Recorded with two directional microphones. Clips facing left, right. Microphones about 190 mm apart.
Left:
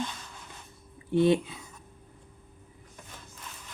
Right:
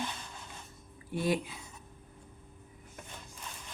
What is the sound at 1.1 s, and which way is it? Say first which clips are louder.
Speech: left 8 dB; 25° left (ahead or behind).